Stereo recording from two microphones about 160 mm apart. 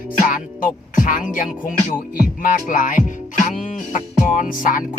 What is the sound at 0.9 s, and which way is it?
Music, 55° left (ahead or behind).